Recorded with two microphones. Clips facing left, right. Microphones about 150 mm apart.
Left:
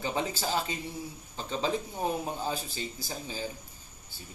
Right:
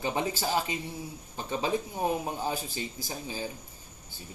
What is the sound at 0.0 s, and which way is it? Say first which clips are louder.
Speech: right 2 dB; 15° right (ahead or behind).